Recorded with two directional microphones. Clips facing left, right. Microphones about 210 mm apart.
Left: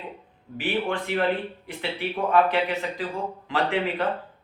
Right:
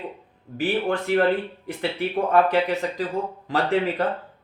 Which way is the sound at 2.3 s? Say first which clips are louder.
Right 1 dB; 40° right (ahead or behind).